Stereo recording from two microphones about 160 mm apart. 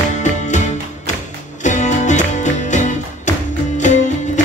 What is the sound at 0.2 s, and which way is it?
Music, 50° left (ahead or behind).